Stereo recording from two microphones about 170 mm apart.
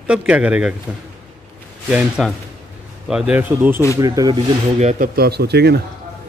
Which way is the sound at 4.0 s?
20° right (ahead or behind).